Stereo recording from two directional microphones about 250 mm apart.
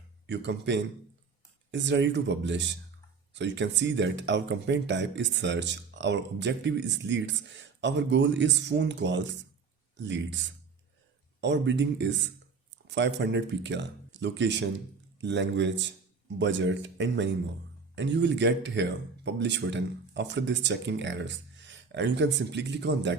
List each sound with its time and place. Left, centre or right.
0.3 s speech: right